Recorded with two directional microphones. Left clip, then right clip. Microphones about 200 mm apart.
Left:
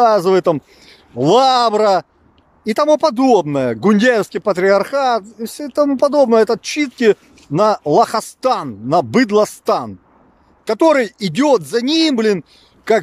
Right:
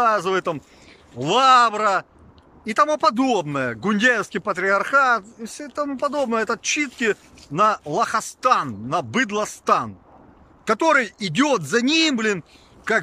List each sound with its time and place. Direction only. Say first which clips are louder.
0.0 s speech: left 8 dB; 25° left (ahead or behind)